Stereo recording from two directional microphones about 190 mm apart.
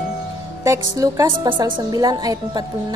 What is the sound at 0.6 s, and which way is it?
A woman's voice, 15° right (ahead or behind).